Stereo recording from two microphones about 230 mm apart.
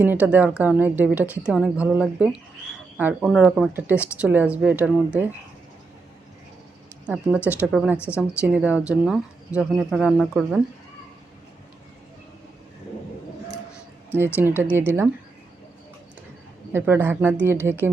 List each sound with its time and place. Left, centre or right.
0.0 s a woman's voice: centre
7.4 s speech: centre
7.9 s a woman's voice: centre
8.4 s speech: centre
14.3 s a woman's voice: centre
16.7 s a woman's voice: centre